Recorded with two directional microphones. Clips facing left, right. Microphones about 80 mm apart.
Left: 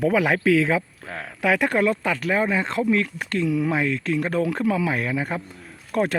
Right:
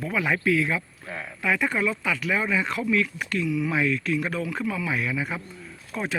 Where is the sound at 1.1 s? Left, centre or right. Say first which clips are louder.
Left 4 dB; left.